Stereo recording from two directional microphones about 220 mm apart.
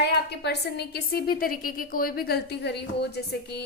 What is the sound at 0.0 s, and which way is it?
A woman's voice, 50° left (ahead or behind).